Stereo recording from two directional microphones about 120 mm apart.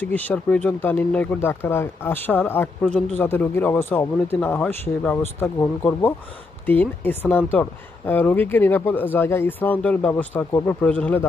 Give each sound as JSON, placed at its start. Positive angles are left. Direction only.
{"t": 0.0, "sound": "speech", "side_deg": 15}